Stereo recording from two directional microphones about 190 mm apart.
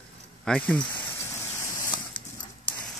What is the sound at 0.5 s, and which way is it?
Speech, 5° left (ahead or behind).